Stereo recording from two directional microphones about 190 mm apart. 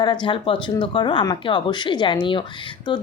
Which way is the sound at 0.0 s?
25° left (ahead or behind).